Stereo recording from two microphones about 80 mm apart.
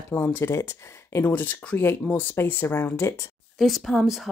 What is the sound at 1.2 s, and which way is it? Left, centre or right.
Speech, left.